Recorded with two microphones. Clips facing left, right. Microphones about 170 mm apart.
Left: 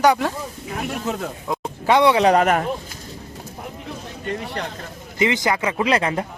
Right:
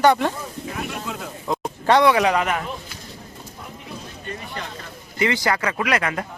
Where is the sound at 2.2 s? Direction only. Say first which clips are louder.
Left 5 dB; 45° left (ahead or behind).